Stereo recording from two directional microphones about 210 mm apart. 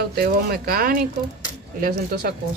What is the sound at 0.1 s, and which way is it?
Speech, 45° right (ahead or behind).